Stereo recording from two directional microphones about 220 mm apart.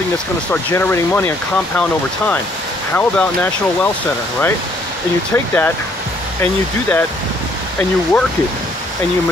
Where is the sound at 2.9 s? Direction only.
5° left (ahead or behind).